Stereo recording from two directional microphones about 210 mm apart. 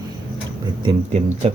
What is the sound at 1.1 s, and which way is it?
Speech, 30° right (ahead or behind).